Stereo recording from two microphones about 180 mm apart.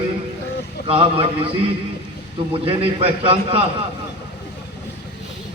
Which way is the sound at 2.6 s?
30° right (ahead or behind).